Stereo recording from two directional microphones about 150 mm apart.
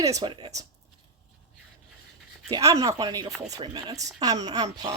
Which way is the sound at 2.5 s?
20° right (ahead or behind).